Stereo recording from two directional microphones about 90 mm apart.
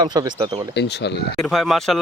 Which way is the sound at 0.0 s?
50° right (ahead or behind).